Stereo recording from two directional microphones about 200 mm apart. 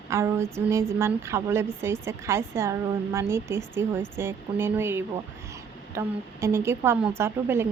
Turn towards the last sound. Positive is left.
turn(degrees=-10)  # may be behind; listen again after turning